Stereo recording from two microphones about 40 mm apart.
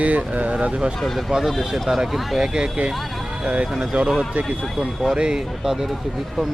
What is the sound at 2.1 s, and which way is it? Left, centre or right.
Speech, centre.